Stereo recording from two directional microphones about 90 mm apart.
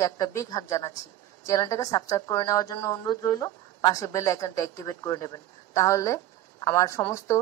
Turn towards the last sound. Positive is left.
turn(degrees=35)  # may be behind; listen again after turning